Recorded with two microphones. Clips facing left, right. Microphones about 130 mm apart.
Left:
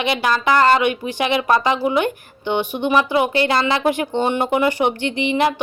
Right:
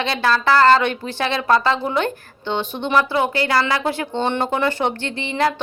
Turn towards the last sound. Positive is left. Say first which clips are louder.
# left 3 dB
turn(degrees=15)  # may be behind; listen again after turning